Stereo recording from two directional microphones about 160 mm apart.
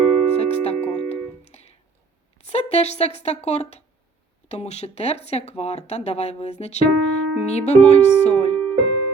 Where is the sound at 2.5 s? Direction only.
40° left (ahead or behind).